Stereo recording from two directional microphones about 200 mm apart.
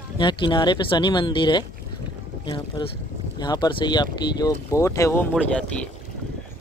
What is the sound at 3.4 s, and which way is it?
Speech, 20° left (ahead or behind).